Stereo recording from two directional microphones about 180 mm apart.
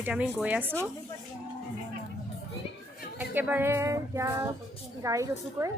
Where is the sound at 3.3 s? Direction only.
10° right (ahead or behind).